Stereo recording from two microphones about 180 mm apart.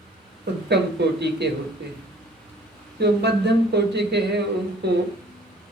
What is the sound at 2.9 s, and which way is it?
Speech, 70° right (ahead or behind).